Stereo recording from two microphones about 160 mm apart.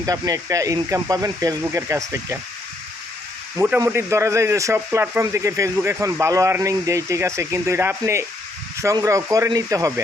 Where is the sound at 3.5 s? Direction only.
15° right (ahead or behind).